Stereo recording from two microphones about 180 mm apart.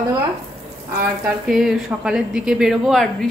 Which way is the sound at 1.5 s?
Centre (ahead or behind).